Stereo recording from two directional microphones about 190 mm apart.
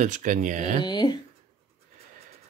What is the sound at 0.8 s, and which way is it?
Speech, 25° left (ahead or behind).